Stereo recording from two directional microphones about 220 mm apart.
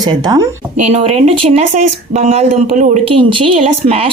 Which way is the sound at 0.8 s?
30° right (ahead or behind).